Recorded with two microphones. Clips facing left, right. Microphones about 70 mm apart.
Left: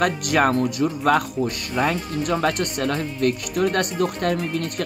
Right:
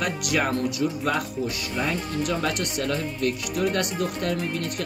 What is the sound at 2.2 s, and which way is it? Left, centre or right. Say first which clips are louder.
Speech: left 6 dB; left.